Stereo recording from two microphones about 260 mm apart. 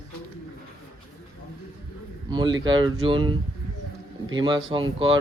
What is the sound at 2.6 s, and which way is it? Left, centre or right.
Speech, centre.